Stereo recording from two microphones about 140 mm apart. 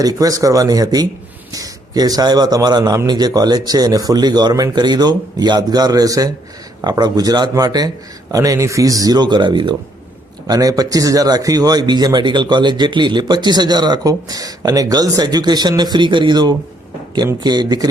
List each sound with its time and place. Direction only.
0.0 s speech: 25° right (ahead or behind)